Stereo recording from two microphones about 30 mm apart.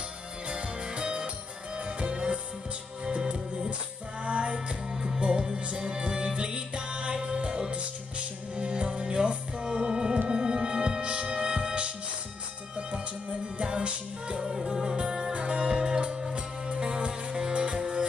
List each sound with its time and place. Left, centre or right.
0.5 s music: right
4.2 s music: right
8.5 s music: right
12.7 s music: right